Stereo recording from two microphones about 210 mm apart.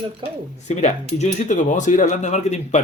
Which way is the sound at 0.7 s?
35° left (ahead or behind).